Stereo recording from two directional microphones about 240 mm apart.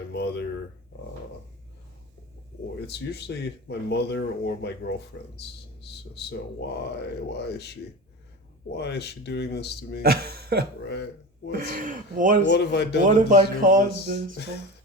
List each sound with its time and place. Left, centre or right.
0.1 s speech: left
2.8 s speech: left
6.8 s speech: left
8.7 s speech: left
10.0 s speech: right
12.5 s speech: left
13.0 s speech: right